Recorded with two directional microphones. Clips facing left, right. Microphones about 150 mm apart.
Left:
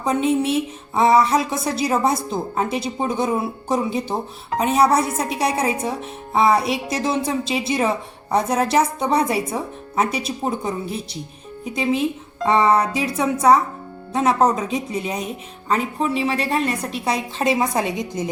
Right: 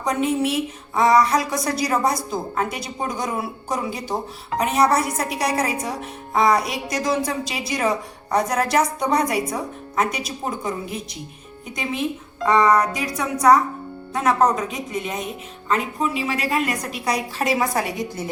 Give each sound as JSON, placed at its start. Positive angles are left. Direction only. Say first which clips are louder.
{"t": 0.0, "sound": "a woman's voice", "louder": "left 2 dB", "side_deg": 30}